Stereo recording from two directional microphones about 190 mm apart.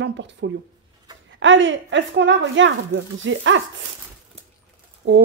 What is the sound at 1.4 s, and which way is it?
Speech, 80° right.